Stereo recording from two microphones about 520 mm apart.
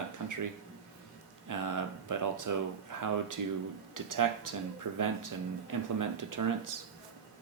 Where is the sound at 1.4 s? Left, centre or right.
Right.